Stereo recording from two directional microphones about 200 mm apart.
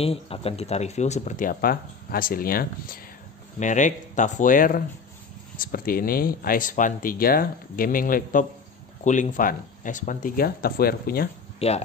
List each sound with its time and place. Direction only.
0.0 s speech: 30° left (ahead or behind); by 11.2 s 50° left (ahead or behind)
11.6 s speech: 30° left (ahead or behind)